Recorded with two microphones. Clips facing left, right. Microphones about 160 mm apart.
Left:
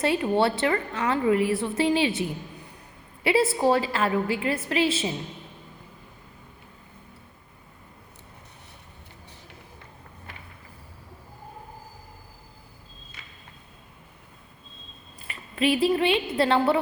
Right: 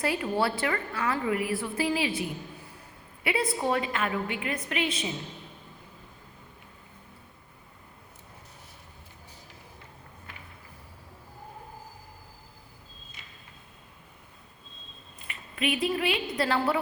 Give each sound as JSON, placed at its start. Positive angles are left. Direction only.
{"t": 0.0, "sound": "a woman's voice", "side_deg": 25}
{"t": 3.3, "sound": "a woman's voice", "side_deg": 30}
{"t": 15.3, "sound": "a woman's voice", "side_deg": 30}